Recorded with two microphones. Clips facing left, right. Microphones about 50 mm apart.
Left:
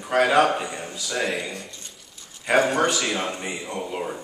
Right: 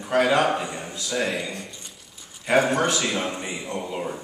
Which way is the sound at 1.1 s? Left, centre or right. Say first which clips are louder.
Even; centre.